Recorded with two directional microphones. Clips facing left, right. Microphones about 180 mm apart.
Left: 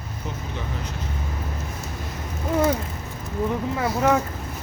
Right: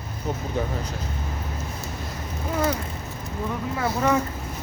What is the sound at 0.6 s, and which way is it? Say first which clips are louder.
Speech: right 10 dB; 40° right (ahead or behind).